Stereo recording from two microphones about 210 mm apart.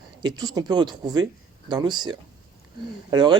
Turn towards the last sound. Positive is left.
turn(degrees=-20)  # may be behind; listen again after turning